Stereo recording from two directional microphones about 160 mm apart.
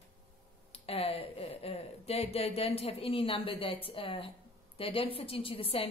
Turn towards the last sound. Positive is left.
turn(degrees=35)  # may be behind; listen again after turning